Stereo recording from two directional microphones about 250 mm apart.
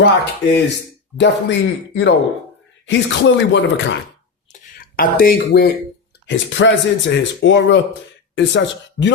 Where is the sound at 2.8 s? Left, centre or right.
Left.